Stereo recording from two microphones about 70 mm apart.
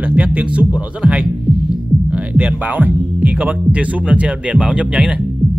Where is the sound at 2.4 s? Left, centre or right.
Right.